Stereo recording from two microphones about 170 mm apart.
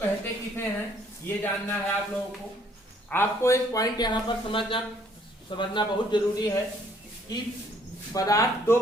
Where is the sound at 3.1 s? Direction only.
15° left (ahead or behind).